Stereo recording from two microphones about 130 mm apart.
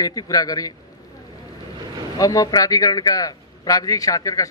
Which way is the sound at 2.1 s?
25° left (ahead or behind).